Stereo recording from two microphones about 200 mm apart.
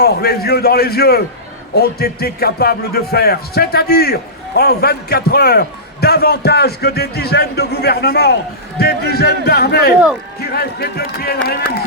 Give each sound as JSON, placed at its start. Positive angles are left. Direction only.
{"t": 0.0, "sound": "speech", "side_deg": 50}